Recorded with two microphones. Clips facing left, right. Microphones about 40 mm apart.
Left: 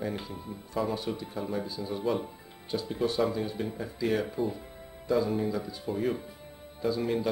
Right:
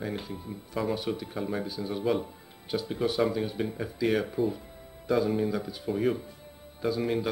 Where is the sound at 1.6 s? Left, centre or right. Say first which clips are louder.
Right 1 dB; right.